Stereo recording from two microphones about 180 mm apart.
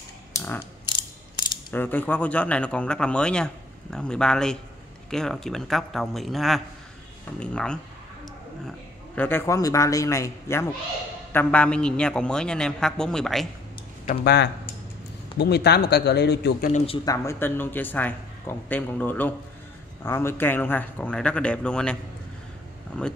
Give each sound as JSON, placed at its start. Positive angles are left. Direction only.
{"t": 0.3, "sound": "ratchet", "side_deg": 10}
{"t": 1.7, "sound": "speech", "side_deg": 10}
{"t": 14.0, "sound": "speech", "side_deg": 65}
{"t": 16.7, "sound": "speech", "side_deg": 30}
{"t": 17.0, "sound": "speech", "side_deg": 15}